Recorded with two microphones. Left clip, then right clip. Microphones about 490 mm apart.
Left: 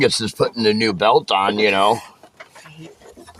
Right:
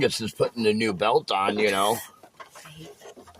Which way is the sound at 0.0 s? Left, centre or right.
Right.